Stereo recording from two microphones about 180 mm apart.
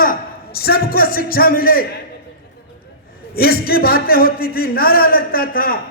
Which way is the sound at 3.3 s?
55° left (ahead or behind).